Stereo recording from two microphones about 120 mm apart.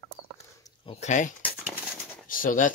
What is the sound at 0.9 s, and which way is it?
Speech, 85° left.